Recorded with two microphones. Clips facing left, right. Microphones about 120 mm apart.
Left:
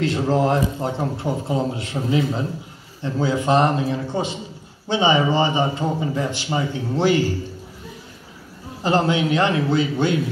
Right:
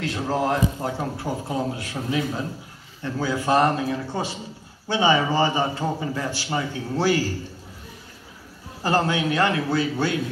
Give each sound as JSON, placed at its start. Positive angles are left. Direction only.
{"t": 0.0, "sound": "speech", "side_deg": 25}
{"t": 8.8, "sound": "speech", "side_deg": 20}